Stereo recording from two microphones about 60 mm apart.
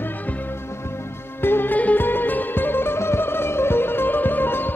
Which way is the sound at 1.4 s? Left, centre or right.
Left.